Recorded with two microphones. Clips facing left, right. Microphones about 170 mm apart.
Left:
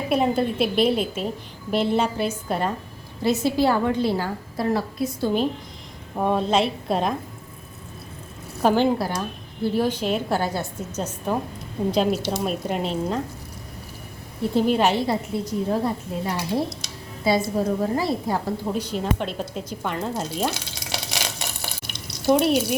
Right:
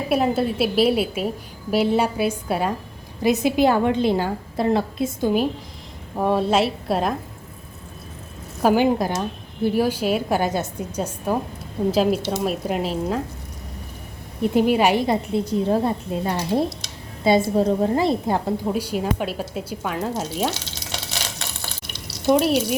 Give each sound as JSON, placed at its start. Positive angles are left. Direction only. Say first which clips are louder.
{"t": 0.1, "sound": "a woman's voice", "louder": "right 1 dB", "side_deg": -5}
{"t": 6.1, "sound": "a woman's voice", "louder": "right 2 dB", "side_deg": 0}
{"t": 8.6, "sound": "a woman's voice", "louder": "right 2 dB", "side_deg": -10}
{"t": 14.4, "sound": "a woman's voice", "louder": "right 2 dB", "side_deg": -15}
{"t": 18.6, "sound": "speech", "louder": "right 3 dB", "side_deg": -10}
{"t": 20.5, "sound": "stir", "louder": "even", "side_deg": 10}
{"t": 22.3, "sound": "a woman's voice", "louder": "right 1 dB", "side_deg": 0}